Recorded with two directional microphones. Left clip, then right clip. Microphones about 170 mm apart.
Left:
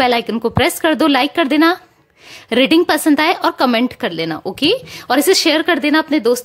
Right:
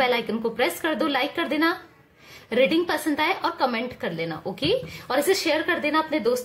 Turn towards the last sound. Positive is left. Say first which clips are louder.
# left 8 dB
turn(degrees=70)  # may be behind; listen again after turning